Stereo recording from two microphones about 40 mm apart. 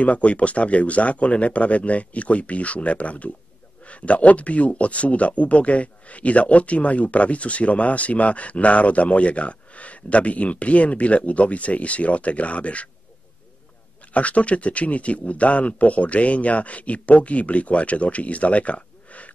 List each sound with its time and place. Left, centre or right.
0.0 s speech: left
14.1 s speech: left